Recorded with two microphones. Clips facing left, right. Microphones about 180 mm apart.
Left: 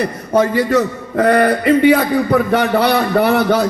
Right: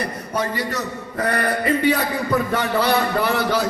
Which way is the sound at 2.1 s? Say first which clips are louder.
Left 7 dB; 65° left (ahead or behind).